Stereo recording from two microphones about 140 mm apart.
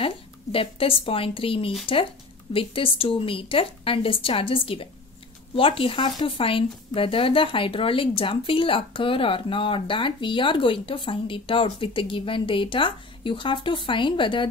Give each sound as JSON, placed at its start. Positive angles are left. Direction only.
{"t": 0.0, "sound": "a woman's voice", "side_deg": 40}